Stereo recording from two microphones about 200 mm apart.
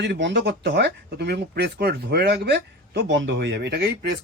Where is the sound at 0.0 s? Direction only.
60° right (ahead or behind).